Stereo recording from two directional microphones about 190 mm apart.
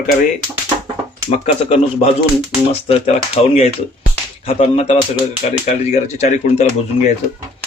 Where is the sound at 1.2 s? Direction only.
30° left (ahead or behind).